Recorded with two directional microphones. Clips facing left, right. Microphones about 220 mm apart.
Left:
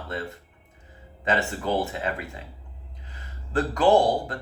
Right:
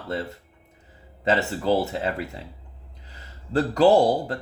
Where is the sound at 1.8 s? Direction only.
35° right (ahead or behind).